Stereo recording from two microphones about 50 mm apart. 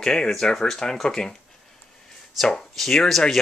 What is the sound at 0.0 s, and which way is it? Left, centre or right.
Speech, centre.